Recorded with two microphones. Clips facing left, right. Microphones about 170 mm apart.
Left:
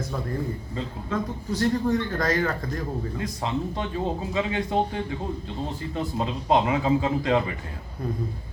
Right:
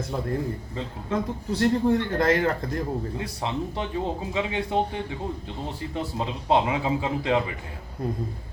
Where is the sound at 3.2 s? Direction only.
15° right (ahead or behind).